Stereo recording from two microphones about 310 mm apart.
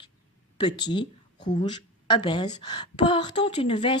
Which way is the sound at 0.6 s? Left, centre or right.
Centre.